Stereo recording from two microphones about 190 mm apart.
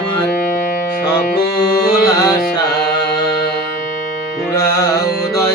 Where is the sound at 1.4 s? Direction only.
55° left (ahead or behind).